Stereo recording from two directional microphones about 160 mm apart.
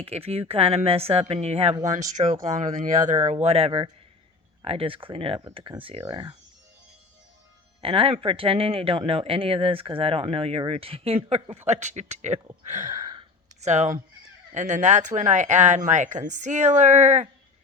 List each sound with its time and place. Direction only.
0.0 s speech: 40° right (ahead or behind)
7.8 s speech: 35° right (ahead or behind)
12.9 s a sound: 25° right (ahead or behind)
13.6 s speech: 45° right (ahead or behind)